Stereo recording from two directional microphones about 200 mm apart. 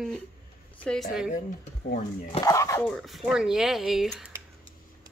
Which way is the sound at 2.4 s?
15° left (ahead or behind).